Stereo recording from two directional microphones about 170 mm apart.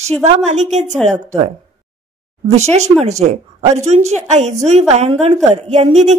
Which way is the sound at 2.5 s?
40° right (ahead or behind).